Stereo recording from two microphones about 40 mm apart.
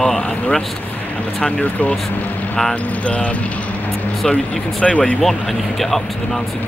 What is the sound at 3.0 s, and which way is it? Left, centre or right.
Speech, left.